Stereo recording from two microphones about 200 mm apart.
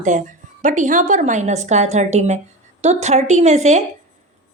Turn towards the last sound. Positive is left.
turn(degrees=-35)  # may be behind; listen again after turning